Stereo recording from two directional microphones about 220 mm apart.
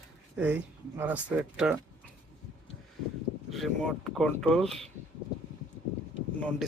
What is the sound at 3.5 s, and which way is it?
Speech, centre (ahead or behind).